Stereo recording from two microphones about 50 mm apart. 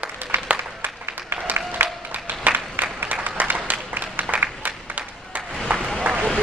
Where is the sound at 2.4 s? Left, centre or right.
Right.